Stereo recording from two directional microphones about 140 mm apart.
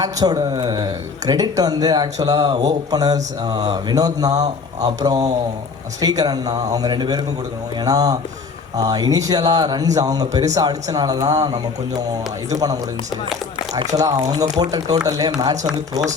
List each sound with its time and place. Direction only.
0.0 s speech: 25° right (ahead or behind)
13.9 s speech: 25° right (ahead or behind)